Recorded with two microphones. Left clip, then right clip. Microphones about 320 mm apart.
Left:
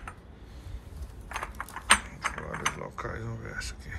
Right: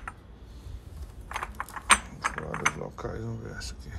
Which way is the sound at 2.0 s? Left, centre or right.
Right.